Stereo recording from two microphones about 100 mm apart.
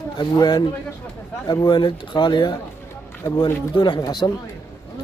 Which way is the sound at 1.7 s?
50° left (ahead or behind).